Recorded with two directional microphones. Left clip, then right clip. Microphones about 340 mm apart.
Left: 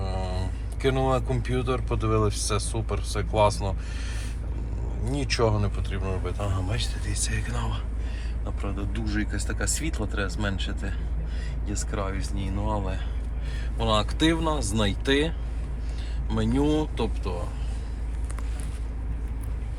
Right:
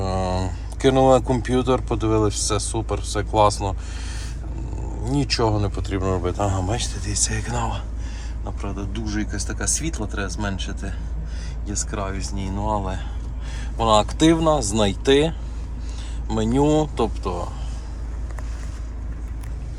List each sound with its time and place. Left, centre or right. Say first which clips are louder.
0.0 s speech: right 9 dB; right